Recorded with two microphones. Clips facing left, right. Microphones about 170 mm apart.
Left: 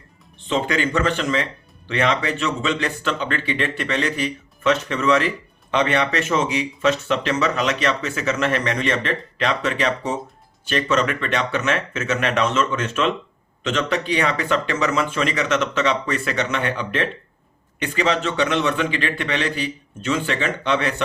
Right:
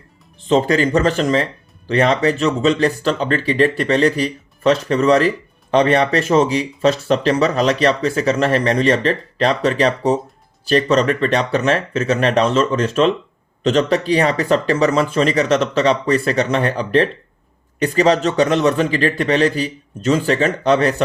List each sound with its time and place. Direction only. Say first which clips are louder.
0.3 s speech: right 7 dB; 35° right (ahead or behind)